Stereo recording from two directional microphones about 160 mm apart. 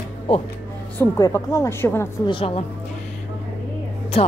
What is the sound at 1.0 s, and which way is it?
A woman's voice, 20° left (ahead or behind).